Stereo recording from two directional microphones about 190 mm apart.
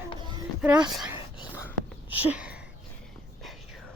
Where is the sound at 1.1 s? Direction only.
25° left (ahead or behind).